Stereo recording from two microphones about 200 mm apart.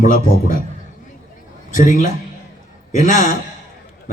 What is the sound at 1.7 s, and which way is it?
A man's voice, 40° left (ahead or behind).